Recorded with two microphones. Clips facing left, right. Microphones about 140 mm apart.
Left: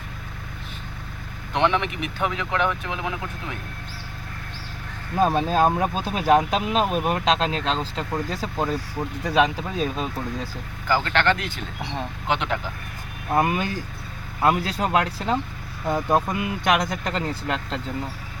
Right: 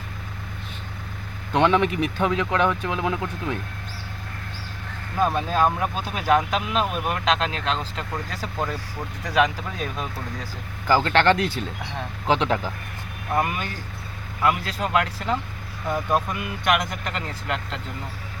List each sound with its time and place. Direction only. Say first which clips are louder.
1.8 s speech: right 4 dB; 35° right (ahead or behind)
5.2 s speech: left 2 dB; 35° left (ahead or behind)
10.8 s speech: right 3 dB; 35° right (ahead or behind)
13.3 s speech: left 3 dB; 30° left (ahead or behind)